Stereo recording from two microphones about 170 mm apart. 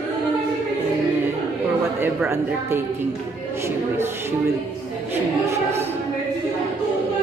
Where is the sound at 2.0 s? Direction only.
15° right (ahead or behind).